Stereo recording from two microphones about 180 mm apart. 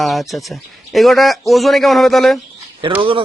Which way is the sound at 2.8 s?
30° right (ahead or behind).